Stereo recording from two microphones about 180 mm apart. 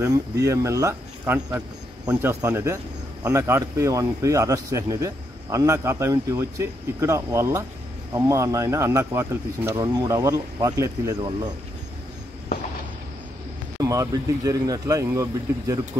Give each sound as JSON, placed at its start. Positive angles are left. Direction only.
{"t": 0.0, "sound": "speech", "side_deg": -15}
{"t": 13.7, "sound": "speech", "side_deg": -20}